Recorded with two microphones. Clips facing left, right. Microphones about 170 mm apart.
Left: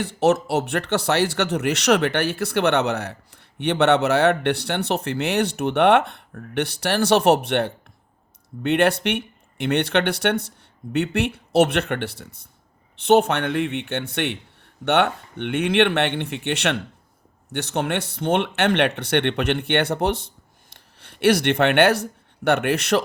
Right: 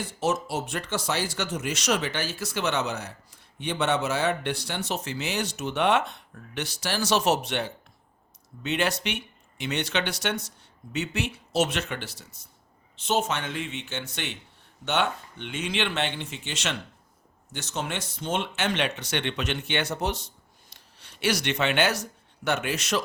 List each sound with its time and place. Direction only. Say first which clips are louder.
0.0 s speech: left 8 dB; 65° left (ahead or behind)